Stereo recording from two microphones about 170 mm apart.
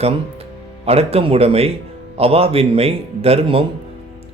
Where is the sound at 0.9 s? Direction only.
35° right (ahead or behind).